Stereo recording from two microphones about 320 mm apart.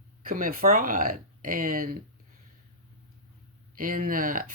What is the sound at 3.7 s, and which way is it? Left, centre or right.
Speech, right.